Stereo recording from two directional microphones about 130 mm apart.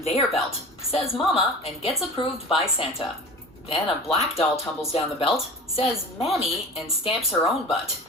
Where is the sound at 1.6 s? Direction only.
50° left (ahead or behind).